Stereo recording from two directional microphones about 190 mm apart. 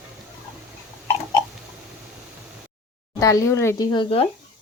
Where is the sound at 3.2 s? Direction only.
15° left (ahead or behind).